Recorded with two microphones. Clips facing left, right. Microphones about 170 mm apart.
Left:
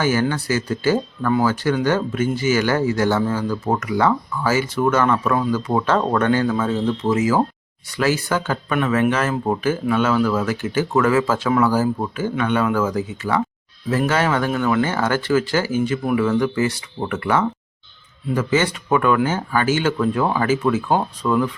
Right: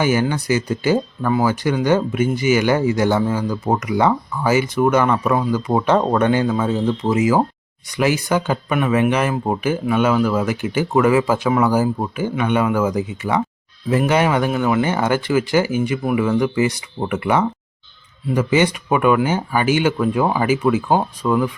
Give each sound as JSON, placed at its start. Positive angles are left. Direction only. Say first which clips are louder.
{"t": 0.0, "sound": "speech", "louder": "right 1 dB", "side_deg": -15}